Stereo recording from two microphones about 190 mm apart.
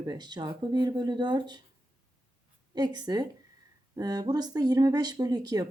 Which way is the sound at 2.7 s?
20° right (ahead or behind).